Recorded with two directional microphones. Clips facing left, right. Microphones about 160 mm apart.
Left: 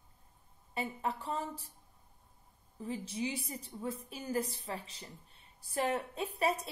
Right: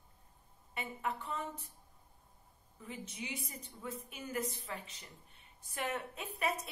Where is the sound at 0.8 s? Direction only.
30° left (ahead or behind).